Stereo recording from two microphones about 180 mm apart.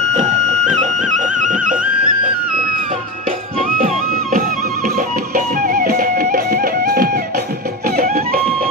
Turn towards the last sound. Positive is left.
turn(degrees=-55)  # may be behind; listen again after turning